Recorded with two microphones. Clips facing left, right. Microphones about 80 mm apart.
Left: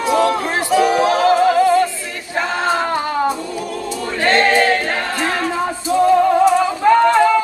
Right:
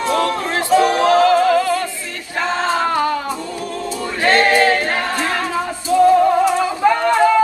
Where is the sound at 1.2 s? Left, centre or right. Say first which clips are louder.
Left 1 dB; left.